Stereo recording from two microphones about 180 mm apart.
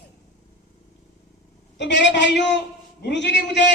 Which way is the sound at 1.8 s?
80° left.